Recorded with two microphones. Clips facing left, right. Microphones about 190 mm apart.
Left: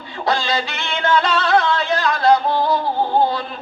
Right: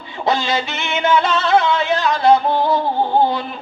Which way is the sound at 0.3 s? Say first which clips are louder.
Right 2 dB; 20° right (ahead or behind).